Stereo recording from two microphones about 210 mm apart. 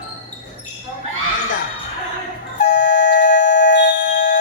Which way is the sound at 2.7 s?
50° left (ahead or behind).